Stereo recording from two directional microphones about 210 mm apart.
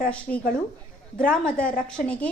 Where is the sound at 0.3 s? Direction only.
40° left (ahead or behind).